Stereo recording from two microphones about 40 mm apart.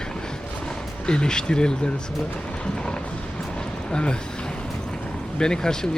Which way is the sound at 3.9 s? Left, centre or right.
Left.